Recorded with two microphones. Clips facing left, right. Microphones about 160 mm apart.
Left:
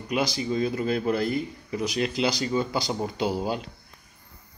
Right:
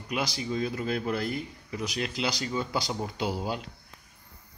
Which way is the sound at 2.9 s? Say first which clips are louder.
Left 4 dB; 30° left (ahead or behind).